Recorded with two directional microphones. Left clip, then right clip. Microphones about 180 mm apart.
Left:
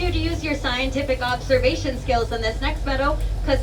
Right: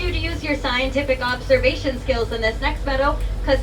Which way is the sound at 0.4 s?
20° left (ahead or behind).